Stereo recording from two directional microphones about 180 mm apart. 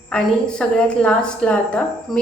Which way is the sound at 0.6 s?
5° left (ahead or behind).